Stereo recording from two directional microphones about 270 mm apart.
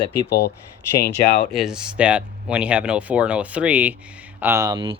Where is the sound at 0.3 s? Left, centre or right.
Left.